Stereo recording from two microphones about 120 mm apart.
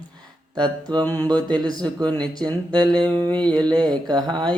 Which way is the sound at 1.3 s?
35° right (ahead or behind).